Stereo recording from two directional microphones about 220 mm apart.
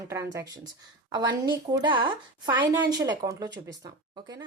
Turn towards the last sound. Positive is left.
turn(degrees=-15)  # may be behind; listen again after turning